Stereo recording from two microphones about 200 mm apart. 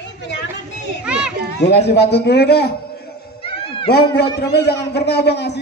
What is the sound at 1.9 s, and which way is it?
Speech, 55° left (ahead or behind).